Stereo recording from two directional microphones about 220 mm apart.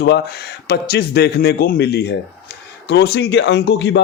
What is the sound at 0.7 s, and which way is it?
A man's voice, 45° left (ahead or behind).